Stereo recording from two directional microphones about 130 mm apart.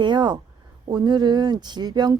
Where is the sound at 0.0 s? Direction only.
35° right (ahead or behind).